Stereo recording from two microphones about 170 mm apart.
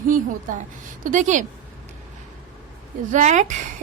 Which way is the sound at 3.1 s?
45° right (ahead or behind).